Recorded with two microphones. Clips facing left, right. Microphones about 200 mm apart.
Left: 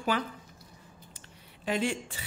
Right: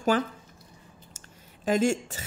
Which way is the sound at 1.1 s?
45° right (ahead or behind).